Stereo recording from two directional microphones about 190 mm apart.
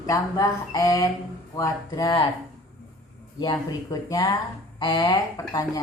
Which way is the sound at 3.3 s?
20° left (ahead or behind).